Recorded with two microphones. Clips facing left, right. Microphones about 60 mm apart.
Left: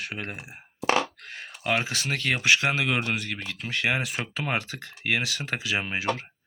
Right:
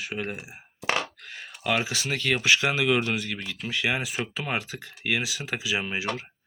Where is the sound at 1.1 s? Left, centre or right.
Left.